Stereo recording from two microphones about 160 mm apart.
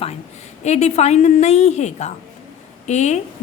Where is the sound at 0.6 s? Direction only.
45° left (ahead or behind).